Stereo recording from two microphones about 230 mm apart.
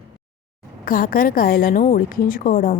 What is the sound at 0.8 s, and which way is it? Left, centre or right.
A woman's voice, left.